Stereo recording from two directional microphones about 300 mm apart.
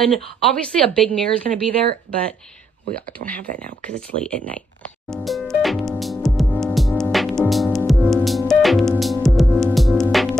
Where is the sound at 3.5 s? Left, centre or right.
Right.